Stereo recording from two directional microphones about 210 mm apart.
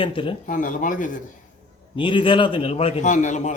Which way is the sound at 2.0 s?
25° left (ahead or behind).